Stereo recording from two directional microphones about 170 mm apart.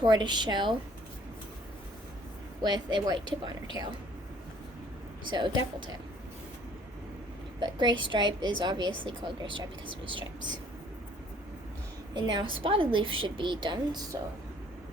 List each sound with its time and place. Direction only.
0.0 s a woman's voice: 25° right (ahead or behind)
2.6 s a woman's voice: 25° right (ahead or behind)
5.3 s a woman's voice: 25° right (ahead or behind)
7.6 s a woman's voice: 25° right (ahead or behind)
12.1 s a woman's voice: 25° right (ahead or behind)